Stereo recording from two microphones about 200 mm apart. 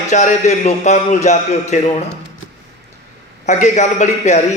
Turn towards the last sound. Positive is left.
turn(degrees=35)  # may be behind; listen again after turning